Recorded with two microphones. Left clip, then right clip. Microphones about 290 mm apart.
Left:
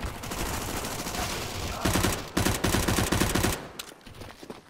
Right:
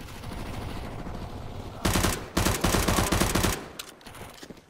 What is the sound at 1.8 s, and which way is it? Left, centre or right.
Machine gun, centre.